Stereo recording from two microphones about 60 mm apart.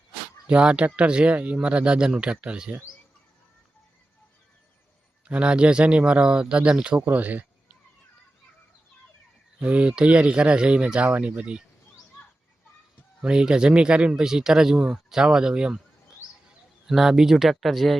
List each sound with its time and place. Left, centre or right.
0.4 s speech: centre
5.2 s speech: centre
7.0 s a sound: right
9.6 s speech: right
13.2 s speech: centre